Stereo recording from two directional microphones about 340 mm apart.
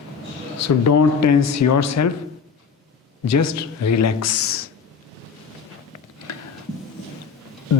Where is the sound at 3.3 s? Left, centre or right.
Left.